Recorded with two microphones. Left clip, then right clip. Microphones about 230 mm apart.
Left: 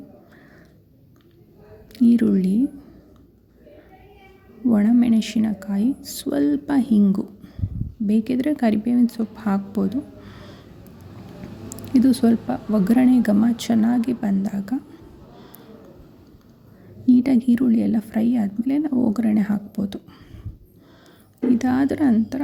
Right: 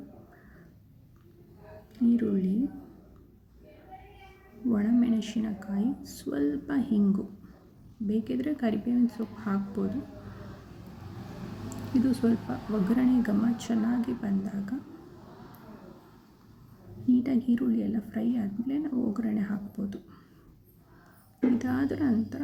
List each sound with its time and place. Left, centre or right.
1.9 s speech: left
4.7 s speech: left
11.7 s speech: left
17.1 s speech: left
21.6 s speech: left